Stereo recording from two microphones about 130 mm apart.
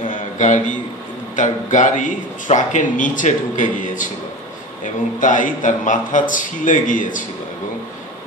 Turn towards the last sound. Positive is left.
turn(degrees=90)